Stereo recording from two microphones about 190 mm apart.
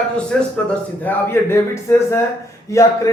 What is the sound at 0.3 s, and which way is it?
A man's voice, 5° left (ahead or behind).